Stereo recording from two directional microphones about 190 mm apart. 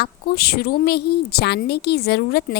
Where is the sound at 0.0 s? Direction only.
55° left (ahead or behind).